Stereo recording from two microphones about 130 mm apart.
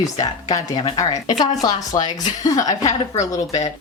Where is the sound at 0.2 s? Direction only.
30° left (ahead or behind).